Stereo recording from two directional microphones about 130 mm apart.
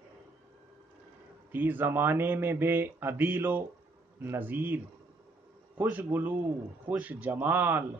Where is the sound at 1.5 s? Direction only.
15° right (ahead or behind).